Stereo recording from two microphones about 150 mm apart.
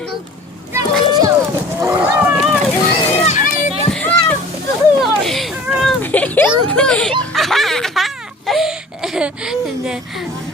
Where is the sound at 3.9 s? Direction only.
10° left (ahead or behind).